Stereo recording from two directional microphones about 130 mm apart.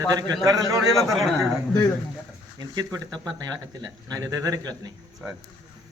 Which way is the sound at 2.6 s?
30° right (ahead or behind).